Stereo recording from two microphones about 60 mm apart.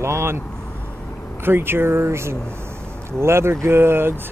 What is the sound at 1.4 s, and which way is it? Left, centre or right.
Speech, right.